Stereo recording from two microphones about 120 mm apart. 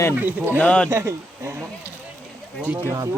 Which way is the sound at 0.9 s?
20° right (ahead or behind).